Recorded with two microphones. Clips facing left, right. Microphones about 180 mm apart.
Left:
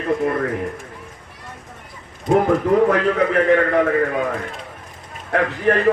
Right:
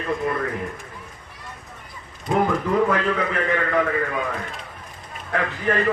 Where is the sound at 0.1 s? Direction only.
40° left (ahead or behind).